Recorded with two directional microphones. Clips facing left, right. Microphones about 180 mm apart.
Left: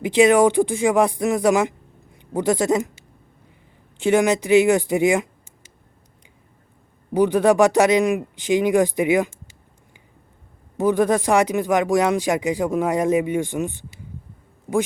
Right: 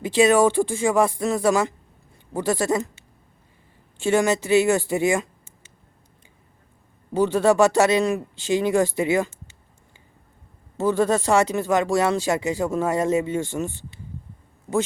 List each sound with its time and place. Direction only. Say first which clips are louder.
0.0 s speech: left 2 dB; 15° left (ahead or behind)
3.9 s speech: left 2 dB; 15° left (ahead or behind)
7.1 s speech: left 2 dB; 15° left (ahead or behind)
10.8 s speech: left 2 dB; 15° left (ahead or behind)